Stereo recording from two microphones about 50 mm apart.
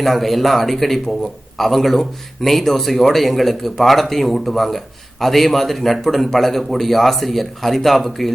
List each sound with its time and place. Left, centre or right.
0.0 s a man's voice: centre